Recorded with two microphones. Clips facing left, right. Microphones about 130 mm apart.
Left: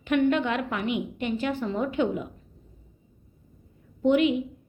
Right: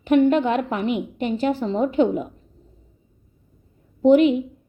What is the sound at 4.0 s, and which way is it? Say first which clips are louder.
Speech: right 7 dB; 35° right (ahead or behind).